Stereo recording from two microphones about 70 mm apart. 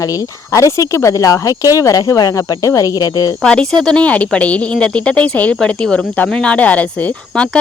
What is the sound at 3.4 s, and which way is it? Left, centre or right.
Speech, centre.